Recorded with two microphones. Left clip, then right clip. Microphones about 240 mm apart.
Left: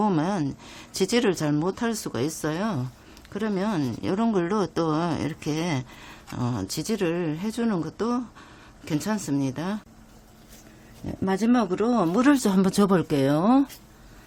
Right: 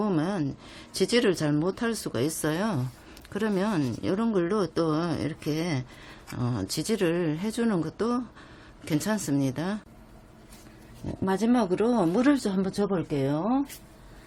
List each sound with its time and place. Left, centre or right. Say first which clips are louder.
0.0 s speech: left 3 dB; centre
11.3 s speech: left 1 dB; centre
12.3 s speech: left 4 dB; left